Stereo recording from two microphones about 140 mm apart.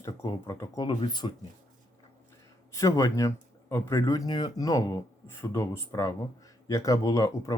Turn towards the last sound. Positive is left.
turn(degrees=25)  # may be behind; listen again after turning